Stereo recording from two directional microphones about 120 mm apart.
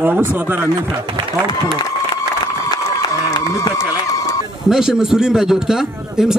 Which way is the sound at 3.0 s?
35° left (ahead or behind).